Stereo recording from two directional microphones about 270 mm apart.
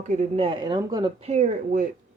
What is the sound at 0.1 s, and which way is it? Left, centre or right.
Speech, right.